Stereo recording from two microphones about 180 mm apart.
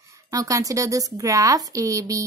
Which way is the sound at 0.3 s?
20° right (ahead or behind).